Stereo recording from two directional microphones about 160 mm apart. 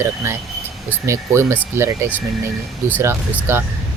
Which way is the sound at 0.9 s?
15° right (ahead or behind).